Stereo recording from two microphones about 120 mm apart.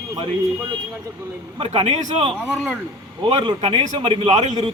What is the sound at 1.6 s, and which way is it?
Speech, 60° right (ahead or behind).